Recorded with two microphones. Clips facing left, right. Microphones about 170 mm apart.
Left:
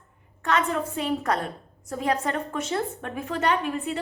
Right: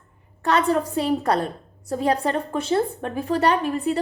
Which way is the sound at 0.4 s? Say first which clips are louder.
Right 5 dB; 35° right (ahead or behind).